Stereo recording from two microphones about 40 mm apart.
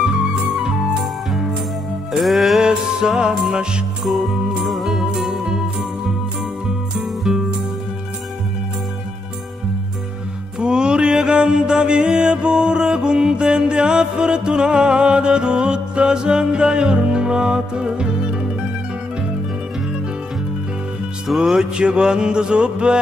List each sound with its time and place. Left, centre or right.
2.1 s music: centre
2.6 s music: centre
4.6 s music: centre
5.2 s music: centre
7.3 s music: centre
10.6 s music: right
21.4 s music: centre